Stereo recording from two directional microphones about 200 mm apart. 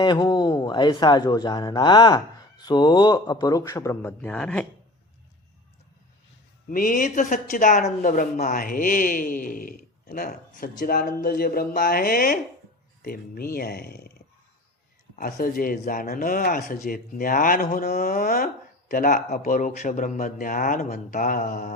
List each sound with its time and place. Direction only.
0.0 s speech: 20° left (ahead or behind); by 4.6 s 5° left (ahead or behind)
6.7 s speech: 40° left (ahead or behind)
15.1 s speech: 45° left (ahead or behind)